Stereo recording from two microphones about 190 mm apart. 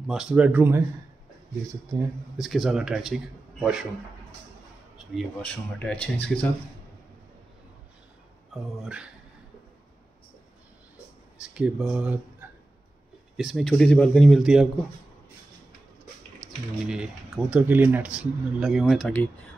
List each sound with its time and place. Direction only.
0.0 s speech: 5° right (ahead or behind)
1.9 s speech: 15° right (ahead or behind)
2.3 s speech: centre (ahead or behind)
4.9 s speech: centre (ahead or behind)
8.8 s speech: 5° right (ahead or behind)
11.4 s speech: 5° right (ahead or behind)
16.8 s speech: 5° right (ahead or behind)